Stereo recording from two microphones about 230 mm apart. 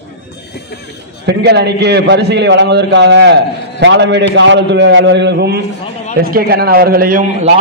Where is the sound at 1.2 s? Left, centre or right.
Right.